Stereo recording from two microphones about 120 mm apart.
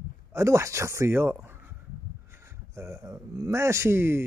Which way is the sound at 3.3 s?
25° right (ahead or behind).